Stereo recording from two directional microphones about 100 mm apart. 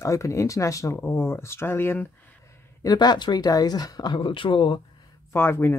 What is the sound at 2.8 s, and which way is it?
Speech, 45° left (ahead or behind).